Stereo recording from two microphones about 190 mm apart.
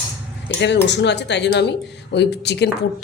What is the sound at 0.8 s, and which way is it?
Speech, 65° left (ahead or behind).